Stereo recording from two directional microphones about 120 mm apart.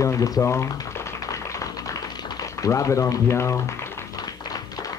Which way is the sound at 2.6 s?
25° left (ahead or behind).